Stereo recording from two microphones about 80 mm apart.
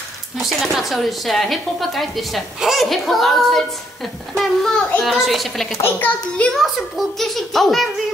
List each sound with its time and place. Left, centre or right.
0.4 s a woman's voice: centre
5.9 s a child's voice: left
6.5 s a woman's voice: centre